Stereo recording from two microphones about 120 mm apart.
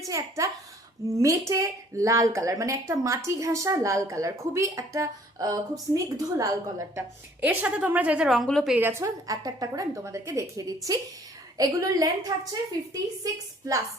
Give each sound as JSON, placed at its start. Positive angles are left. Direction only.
{"t": 0.0, "sound": "speech", "side_deg": -30}
{"t": 7.4, "sound": "a woman's voice", "side_deg": -10}
{"t": 8.7, "sound": "speech", "side_deg": -20}